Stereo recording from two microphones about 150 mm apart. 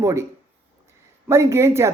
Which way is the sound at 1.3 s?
20° right (ahead or behind).